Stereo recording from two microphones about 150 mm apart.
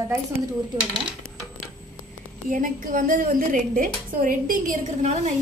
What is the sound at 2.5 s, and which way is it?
A woman's voice, 65° right (ahead or behind).